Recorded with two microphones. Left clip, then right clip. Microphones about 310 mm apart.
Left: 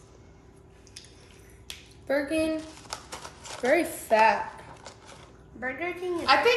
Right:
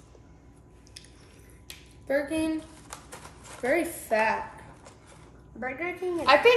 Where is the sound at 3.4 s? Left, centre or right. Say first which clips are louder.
Left 3 dB; left.